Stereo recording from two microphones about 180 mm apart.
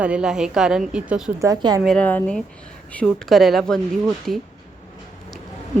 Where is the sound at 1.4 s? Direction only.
20° right (ahead or behind).